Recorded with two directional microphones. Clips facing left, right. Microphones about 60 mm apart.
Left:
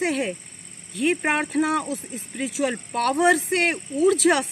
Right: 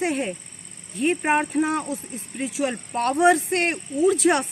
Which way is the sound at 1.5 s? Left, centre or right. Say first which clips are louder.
Left 1 dB; left.